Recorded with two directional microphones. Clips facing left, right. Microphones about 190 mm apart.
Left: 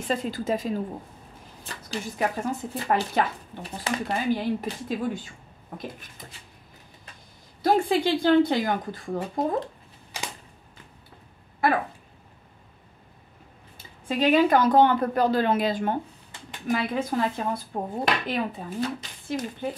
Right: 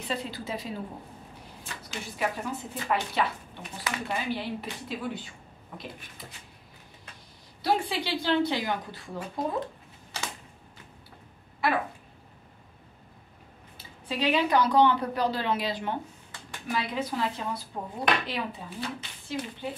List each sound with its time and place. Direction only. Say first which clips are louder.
0.0 s speech: left 6 dB; 45° left (ahead or behind)
7.6 s speech: left 6 dB; 50° left (ahead or behind)
10.1 s typewriter: left 1 dB; 15° left (ahead or behind)
14.0 s speech: left 6 dB; 50° left (ahead or behind)